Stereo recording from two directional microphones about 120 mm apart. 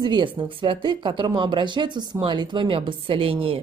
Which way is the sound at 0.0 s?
40° right (ahead or behind).